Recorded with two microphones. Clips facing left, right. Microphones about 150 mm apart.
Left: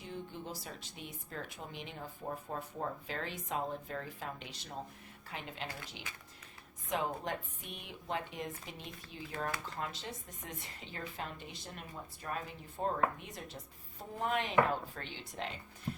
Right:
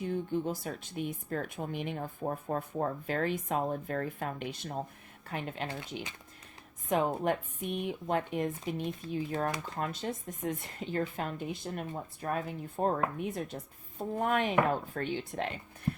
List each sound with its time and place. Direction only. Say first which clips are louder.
0.0 s speech: right 12 dB; 50° right (ahead or behind)
6.9 s speech: right 7 dB; 50° right (ahead or behind)